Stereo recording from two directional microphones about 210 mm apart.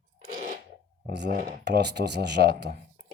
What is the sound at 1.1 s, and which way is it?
Speech, 55° right (ahead or behind).